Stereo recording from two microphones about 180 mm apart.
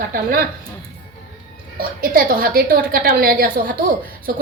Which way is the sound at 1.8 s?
50° right (ahead or behind).